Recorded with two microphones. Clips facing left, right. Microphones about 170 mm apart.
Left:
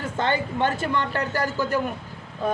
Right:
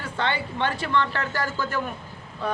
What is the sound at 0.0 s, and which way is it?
A man's voice, 40° left (ahead or behind).